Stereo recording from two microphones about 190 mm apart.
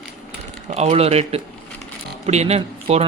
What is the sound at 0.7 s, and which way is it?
Speech, 35° right (ahead or behind).